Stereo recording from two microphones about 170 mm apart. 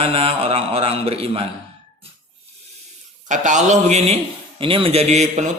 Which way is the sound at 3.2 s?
45° right (ahead or behind).